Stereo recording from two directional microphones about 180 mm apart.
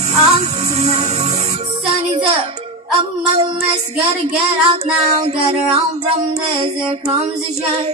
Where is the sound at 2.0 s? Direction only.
30° right (ahead or behind).